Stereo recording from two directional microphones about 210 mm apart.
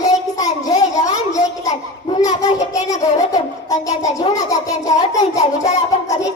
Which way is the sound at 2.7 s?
15° left (ahead or behind).